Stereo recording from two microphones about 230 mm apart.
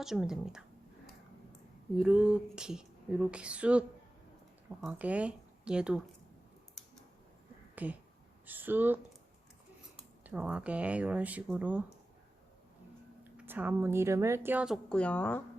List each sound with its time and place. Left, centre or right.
0.0 s speech: centre
2.0 s speech: centre
7.8 s a woman's voice: centre
10.2 s speech: centre
13.3 s a woman's voice: centre